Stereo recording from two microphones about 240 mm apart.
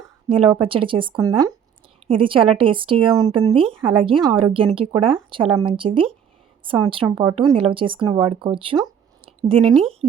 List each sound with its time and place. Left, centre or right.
0.3 s speech: right
9.6 s speech: centre